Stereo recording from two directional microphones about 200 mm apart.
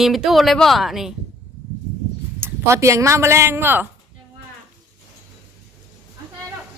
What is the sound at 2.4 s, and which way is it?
Speech, 15° right (ahead or behind).